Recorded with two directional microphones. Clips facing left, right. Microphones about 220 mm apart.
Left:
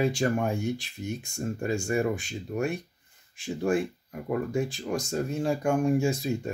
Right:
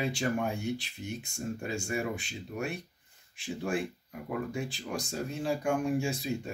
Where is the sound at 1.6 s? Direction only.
45° left (ahead or behind).